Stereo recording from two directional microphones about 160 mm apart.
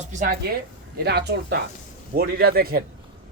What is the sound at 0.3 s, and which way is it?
Speech, 75° right (ahead or behind).